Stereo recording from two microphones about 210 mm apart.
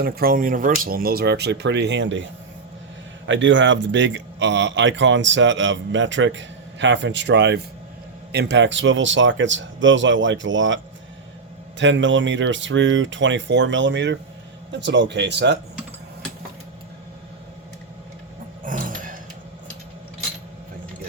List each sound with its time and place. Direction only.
0.0 s speech: 45° right (ahead or behind)
3.2 s speech: 60° right (ahead or behind)
11.8 s speech: 60° right (ahead or behind)
18.6 s a sound: 40° right (ahead or behind)